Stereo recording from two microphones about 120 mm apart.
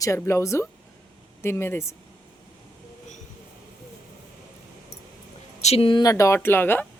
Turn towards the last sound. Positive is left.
turn(degrees=20)  # may be behind; listen again after turning